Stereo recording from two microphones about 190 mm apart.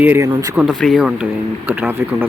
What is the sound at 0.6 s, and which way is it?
Speech, centre (ahead or behind).